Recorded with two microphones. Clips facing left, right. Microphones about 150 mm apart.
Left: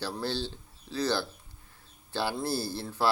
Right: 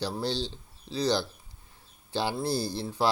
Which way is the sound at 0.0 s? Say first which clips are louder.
Right 2 dB; 15° right (ahead or behind).